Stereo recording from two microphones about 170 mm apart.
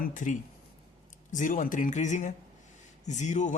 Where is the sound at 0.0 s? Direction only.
50° left (ahead or behind).